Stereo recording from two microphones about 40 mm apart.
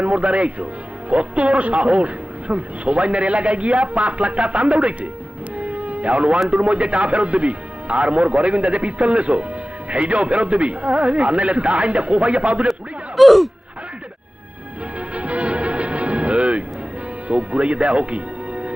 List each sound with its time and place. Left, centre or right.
0.0 s speech: right
5.5 s a sound: right
6.5 s speech: right
13.1 s speech: centre
15.1 s music: right
17.2 s speech: right